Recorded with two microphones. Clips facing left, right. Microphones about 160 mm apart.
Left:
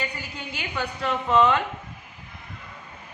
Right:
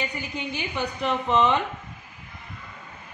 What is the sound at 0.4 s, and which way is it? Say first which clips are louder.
A woman's voice: right 2 dB; 20° right (ahead or behind).